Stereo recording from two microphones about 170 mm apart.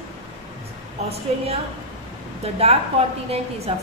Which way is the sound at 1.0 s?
35° right (ahead or behind).